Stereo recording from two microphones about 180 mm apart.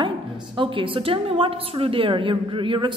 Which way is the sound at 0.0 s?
25° right (ahead or behind).